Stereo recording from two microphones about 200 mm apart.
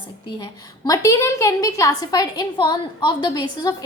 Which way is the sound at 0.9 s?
15° left (ahead or behind).